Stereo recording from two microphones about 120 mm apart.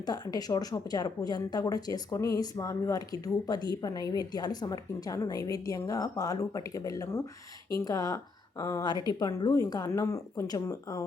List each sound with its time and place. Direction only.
0.0 s a woman's voice: 35° left (ahead or behind)